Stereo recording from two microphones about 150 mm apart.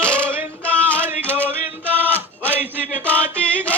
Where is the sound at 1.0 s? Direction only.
15° right (ahead or behind).